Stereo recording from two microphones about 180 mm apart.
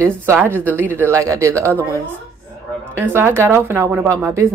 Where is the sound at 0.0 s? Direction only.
15° right (ahead or behind).